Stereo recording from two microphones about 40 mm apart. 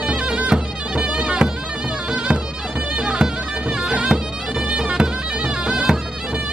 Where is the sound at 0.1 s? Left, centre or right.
Right.